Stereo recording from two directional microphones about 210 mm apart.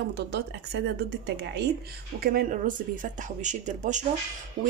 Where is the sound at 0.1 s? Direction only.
55° right (ahead or behind).